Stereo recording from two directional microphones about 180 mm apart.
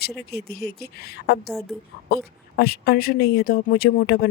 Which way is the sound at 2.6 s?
60° left (ahead or behind).